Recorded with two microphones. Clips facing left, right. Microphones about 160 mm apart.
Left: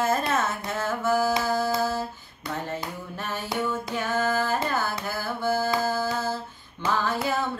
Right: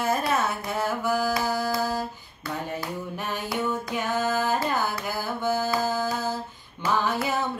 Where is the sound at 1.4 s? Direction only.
15° right (ahead or behind).